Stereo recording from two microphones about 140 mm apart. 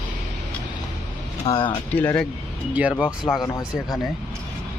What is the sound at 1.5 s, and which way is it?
Speech, 35° left (ahead or behind).